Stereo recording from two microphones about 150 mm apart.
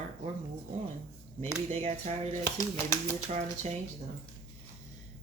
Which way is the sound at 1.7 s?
45° right (ahead or behind).